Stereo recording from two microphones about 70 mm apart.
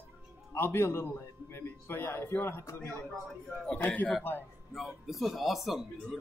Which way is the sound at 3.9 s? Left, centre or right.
Centre.